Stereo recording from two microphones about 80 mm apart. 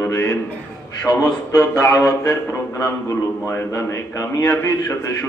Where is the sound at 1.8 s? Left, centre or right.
Left.